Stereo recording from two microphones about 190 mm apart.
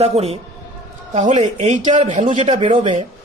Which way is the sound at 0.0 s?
35° right (ahead or behind).